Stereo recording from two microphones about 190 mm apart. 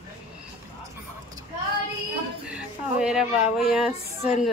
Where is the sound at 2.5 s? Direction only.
5° right (ahead or behind).